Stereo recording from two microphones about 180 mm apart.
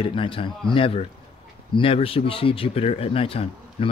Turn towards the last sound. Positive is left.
turn(degrees=30)  # may be behind; listen again after turning